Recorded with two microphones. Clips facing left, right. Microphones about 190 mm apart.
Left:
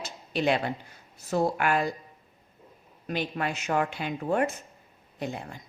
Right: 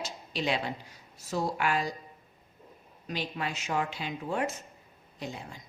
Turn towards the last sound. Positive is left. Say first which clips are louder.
# left 5 dB
turn(degrees=55)  # may be behind; listen again after turning